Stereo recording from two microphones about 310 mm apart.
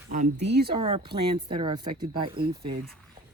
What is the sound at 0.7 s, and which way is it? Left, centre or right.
Speech, centre.